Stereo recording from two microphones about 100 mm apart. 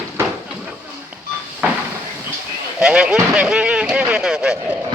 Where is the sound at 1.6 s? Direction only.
15° right (ahead or behind).